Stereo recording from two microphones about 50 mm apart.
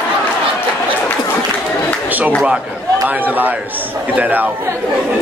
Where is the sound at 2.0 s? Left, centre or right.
Right.